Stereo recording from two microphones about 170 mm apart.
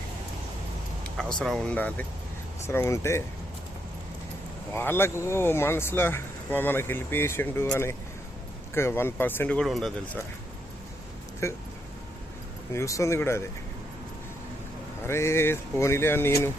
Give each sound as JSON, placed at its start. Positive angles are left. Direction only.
{"t": 1.1, "sound": "speech", "side_deg": 5}
{"t": 4.7, "sound": "speech", "side_deg": 15}
{"t": 11.4, "sound": "speech", "side_deg": 15}
{"t": 12.7, "sound": "speech", "side_deg": 20}
{"t": 15.0, "sound": "speech", "side_deg": 15}